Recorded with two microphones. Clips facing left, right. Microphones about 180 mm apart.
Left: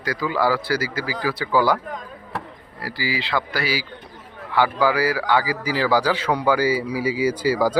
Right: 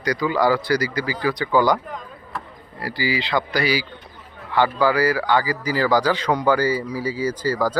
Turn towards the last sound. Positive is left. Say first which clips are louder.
# left 2 dB
turn(degrees=10)  # may be behind; listen again after turning